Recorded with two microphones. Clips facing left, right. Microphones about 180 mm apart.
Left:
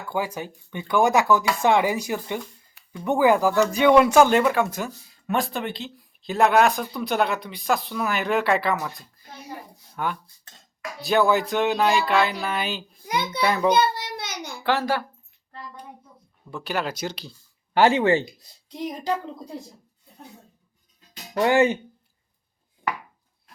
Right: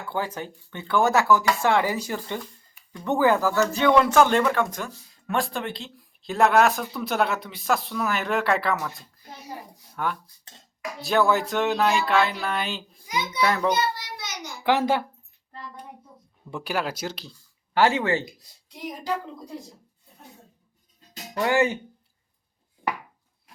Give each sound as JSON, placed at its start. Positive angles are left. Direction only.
{"t": 0.1, "sound": "speech", "side_deg": 10}
{"t": 13.1, "sound": "a sound", "side_deg": 60}
{"t": 13.4, "sound": "speech", "side_deg": 0}
{"t": 14.0, "sound": "child singing", "side_deg": 60}
{"t": 14.6, "sound": "a woman's voice", "side_deg": -20}
{"t": 16.5, "sound": "speech", "side_deg": -15}
{"t": 16.7, "sound": "speech", "side_deg": -5}
{"t": 17.7, "sound": "speech", "side_deg": 20}
{"t": 21.4, "sound": "speech", "side_deg": 20}